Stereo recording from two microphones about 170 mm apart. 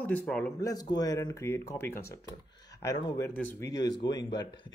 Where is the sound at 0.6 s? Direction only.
20° left (ahead or behind).